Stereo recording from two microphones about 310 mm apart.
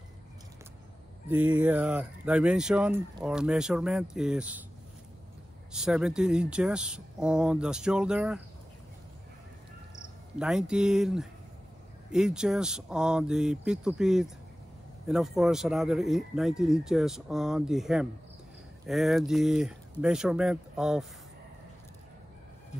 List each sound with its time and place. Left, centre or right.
1.3 s speech: centre
5.7 s speech: centre
10.4 s speech: centre